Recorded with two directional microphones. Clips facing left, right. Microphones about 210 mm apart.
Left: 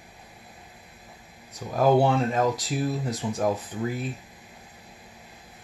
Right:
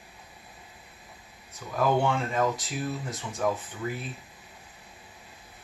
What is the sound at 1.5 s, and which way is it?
Speech, 40° left (ahead or behind).